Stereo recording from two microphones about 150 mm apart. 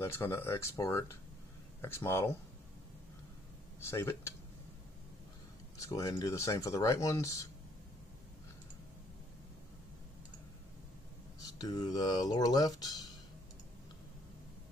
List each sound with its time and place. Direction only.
0.0 s speech: 15° left (ahead or behind)
3.9 s speech: 20° left (ahead or behind)
5.8 s speech: 25° left (ahead or behind)
11.4 s speech: 25° left (ahead or behind)